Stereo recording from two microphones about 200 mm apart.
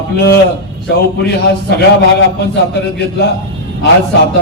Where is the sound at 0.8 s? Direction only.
55° left (ahead or behind).